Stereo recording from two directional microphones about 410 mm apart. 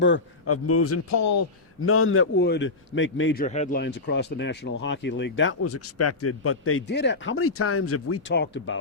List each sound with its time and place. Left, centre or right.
0.0 s a man's voice: left